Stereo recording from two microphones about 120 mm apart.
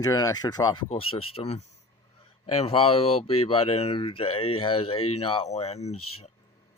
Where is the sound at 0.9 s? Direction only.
50° left (ahead or behind).